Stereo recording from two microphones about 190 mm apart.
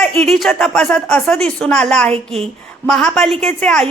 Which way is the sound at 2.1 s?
30° right (ahead or behind).